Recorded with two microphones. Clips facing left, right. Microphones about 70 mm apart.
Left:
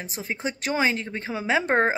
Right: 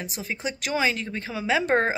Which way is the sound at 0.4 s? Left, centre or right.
Left.